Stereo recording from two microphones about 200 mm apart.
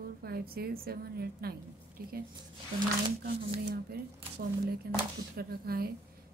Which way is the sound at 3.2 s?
50° right (ahead or behind).